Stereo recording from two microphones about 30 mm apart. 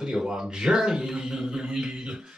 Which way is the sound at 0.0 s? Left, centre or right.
Centre.